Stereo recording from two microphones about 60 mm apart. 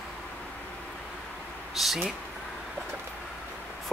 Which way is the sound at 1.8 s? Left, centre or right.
Centre.